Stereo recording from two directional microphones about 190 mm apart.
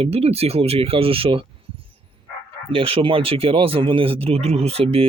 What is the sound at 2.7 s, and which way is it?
Speech, 30° right (ahead or behind).